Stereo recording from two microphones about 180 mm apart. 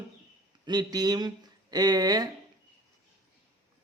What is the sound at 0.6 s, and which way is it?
Speech, 25° right (ahead or behind).